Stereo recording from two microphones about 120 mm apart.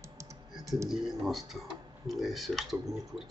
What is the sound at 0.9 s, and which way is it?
Speech, centre (ahead or behind).